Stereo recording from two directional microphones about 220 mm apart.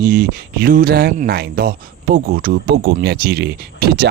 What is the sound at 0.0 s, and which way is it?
Speech, 45° right (ahead or behind).